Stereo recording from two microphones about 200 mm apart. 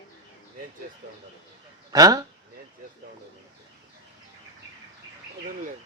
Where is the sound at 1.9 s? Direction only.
20° right (ahead or behind).